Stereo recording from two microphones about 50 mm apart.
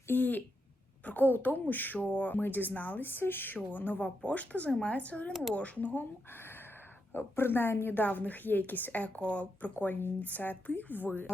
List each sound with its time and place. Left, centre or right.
0.1 s speech: left
3.1 s speech: left
4.2 s speech: left
6.3 s a sound: left
7.1 s speech: left
7.9 s speech: left
9.7 s speech: left